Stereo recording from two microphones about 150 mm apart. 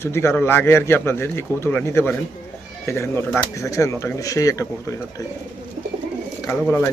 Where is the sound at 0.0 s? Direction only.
15° left (ahead or behind).